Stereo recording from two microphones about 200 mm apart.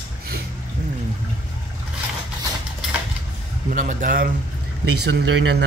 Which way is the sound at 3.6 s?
40° right (ahead or behind).